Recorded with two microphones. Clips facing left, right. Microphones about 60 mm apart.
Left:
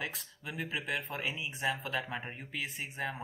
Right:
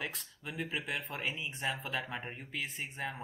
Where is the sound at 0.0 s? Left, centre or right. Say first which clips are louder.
Left 1 dB; centre.